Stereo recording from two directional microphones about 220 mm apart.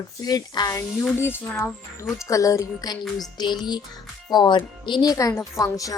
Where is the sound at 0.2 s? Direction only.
15° left (ahead or behind).